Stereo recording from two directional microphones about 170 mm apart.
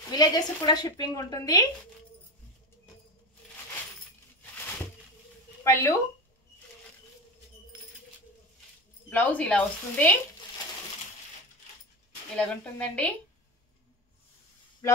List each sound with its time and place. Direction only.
0.1 s a woman's voice: 25° left (ahead or behind)
5.6 s speech: 15° left (ahead or behind)
9.1 s speech: 10° left (ahead or behind)
12.4 s speech: 5° left (ahead or behind)